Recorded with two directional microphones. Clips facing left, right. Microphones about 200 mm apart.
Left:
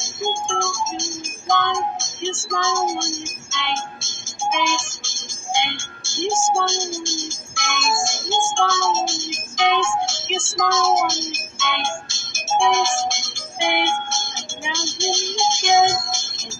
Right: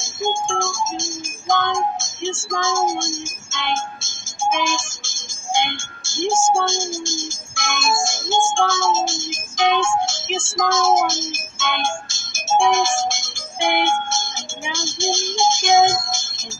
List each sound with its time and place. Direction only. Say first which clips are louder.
0.6 s music: right 1 dB; 45° right (ahead or behind)
10.3 s speech: right 1 dB; 45° right (ahead or behind)